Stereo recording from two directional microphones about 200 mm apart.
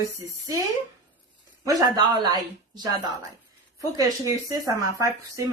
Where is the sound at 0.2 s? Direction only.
15° right (ahead or behind).